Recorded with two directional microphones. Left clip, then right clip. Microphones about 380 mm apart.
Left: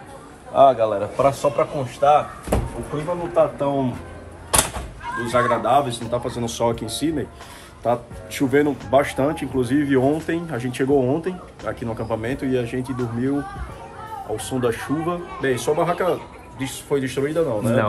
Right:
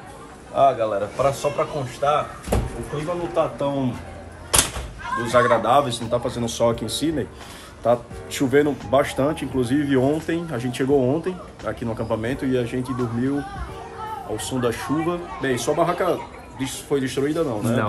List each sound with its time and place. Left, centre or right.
0.6 s a man's voice: centre
3.3 s speech: centre
5.2 s speech: centre
14.3 s speech: centre